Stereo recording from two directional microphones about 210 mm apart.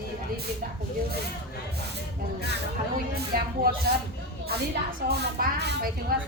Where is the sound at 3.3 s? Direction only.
45° right (ahead or behind).